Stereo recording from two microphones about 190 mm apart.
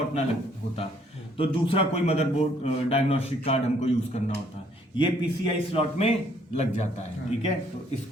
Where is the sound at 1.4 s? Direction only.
30° left (ahead or behind).